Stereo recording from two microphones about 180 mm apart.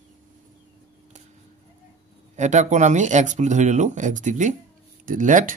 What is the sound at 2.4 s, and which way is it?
Speech, 40° right (ahead or behind).